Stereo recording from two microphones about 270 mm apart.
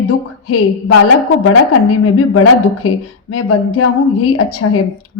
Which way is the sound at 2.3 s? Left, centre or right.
Left.